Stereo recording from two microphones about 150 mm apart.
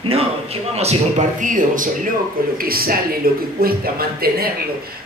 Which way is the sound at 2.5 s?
80° right.